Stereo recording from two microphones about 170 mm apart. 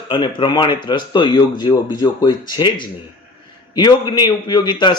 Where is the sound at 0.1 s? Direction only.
30° left (ahead or behind).